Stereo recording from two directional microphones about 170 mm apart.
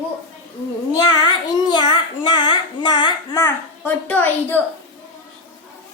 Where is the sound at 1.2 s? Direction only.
25° left (ahead or behind).